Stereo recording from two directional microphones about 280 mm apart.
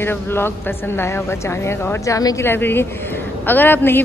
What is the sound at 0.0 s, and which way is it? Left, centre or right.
A woman's voice, centre.